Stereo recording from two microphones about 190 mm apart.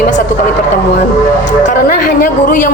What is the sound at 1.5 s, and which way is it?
Speech, 45° left (ahead or behind).